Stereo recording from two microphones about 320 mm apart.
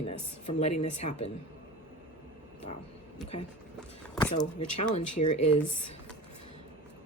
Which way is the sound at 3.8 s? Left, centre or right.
Centre.